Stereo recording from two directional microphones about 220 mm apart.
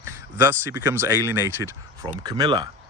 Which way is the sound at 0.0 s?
10° right (ahead or behind).